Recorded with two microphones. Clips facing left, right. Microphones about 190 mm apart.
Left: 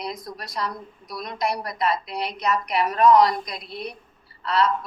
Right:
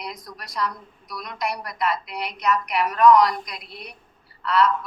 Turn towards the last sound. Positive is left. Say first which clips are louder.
# right 2 dB
turn(degrees=30)  # may be behind; listen again after turning